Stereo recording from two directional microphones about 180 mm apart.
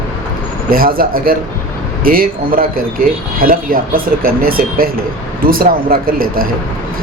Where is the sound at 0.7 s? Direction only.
55° right (ahead or behind).